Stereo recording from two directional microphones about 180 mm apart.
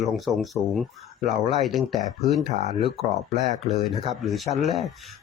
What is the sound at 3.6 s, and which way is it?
Speech, 35° left (ahead or behind).